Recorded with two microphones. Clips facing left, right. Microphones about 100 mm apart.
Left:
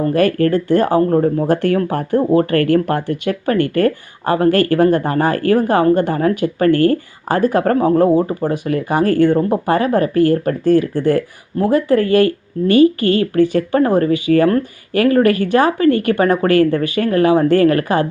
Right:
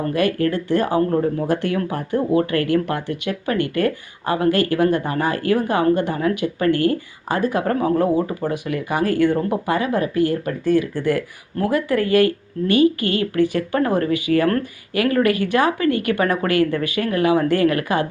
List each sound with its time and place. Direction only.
0.1 s speech: 40° left (ahead or behind)
7.8 s speech: 35° left (ahead or behind)